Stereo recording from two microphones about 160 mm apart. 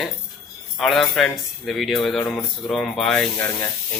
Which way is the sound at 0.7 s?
5° left (ahead or behind).